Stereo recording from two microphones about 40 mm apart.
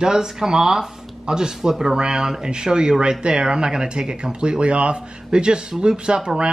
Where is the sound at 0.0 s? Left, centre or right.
Centre.